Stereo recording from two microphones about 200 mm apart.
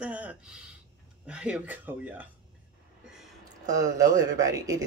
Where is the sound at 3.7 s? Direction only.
15° right (ahead or behind).